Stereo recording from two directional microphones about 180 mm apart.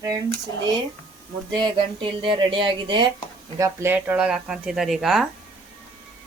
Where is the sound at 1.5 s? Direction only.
25° right (ahead or behind); by 5.2 s centre (ahead or behind).